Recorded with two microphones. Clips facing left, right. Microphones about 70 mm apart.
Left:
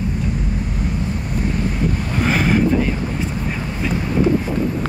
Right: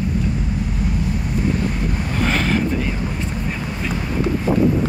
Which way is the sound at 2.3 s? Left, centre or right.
Centre.